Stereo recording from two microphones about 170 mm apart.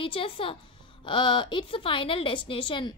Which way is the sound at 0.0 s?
30° left (ahead or behind).